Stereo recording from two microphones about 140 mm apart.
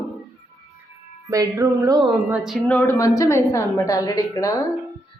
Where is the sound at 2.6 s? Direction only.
15° left (ahead or behind).